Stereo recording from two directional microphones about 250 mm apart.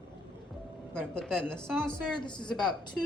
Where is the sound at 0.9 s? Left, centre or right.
Centre.